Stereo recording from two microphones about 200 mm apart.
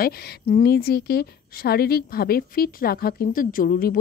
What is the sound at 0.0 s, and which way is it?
A woman's voice, 50° left (ahead or behind).